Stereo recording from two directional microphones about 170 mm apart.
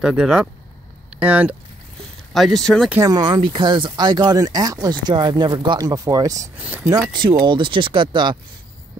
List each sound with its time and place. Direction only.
0.0 s speech: 5° right (ahead or behind)
2.9 s speech: 20° right (ahead or behind)
6.6 s speech: 5° right (ahead or behind)
6.9 s speech: 25° right (ahead or behind)